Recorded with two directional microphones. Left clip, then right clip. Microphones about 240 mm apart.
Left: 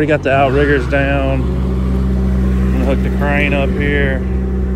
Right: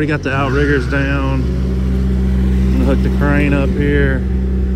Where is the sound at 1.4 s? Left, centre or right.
Left.